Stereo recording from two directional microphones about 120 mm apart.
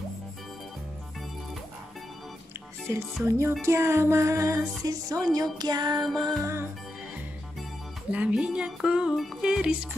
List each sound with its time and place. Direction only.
3.3 s speech: 25° right (ahead or behind)
6.2 s speech: 25° right (ahead or behind)
8.1 s music: 10° right (ahead or behind)